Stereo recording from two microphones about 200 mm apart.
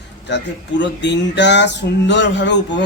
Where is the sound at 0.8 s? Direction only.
60° left (ahead or behind).